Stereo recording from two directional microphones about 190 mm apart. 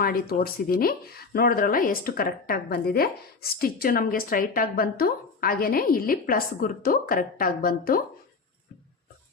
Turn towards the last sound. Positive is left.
turn(degrees=50)  # may be behind; listen again after turning